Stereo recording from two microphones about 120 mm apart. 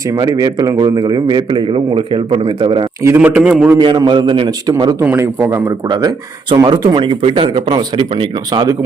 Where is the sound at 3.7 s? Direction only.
35° right (ahead or behind).